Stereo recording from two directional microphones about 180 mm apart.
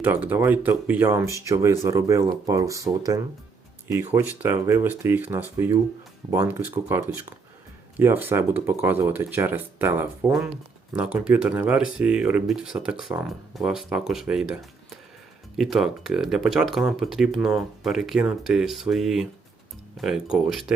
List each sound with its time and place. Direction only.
0.0 s speech: 10° right (ahead or behind)